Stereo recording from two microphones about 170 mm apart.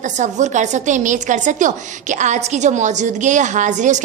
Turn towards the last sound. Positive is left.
turn(degrees=-45)  # may be behind; listen again after turning